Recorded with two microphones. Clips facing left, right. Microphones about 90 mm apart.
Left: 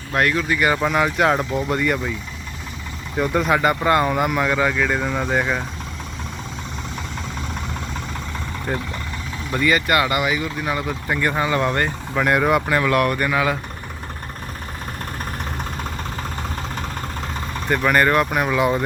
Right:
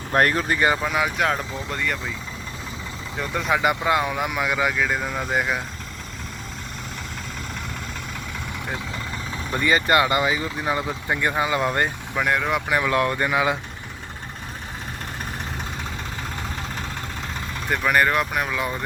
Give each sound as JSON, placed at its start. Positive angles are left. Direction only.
{"t": 0.1, "sound": "speech", "side_deg": -40}
{"t": 0.8, "sound": "speech", "side_deg": 0}
{"t": 3.2, "sound": "speech", "side_deg": 5}
{"t": 9.5, "sound": "speech", "side_deg": -20}
{"t": 12.2, "sound": "speech", "side_deg": 5}
{"t": 12.6, "sound": "speech", "side_deg": -10}
{"t": 17.7, "sound": "speech", "side_deg": -5}